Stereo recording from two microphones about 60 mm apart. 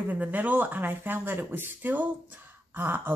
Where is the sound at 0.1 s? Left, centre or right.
Right.